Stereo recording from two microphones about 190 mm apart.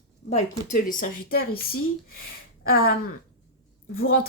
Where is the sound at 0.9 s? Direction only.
50° left (ahead or behind).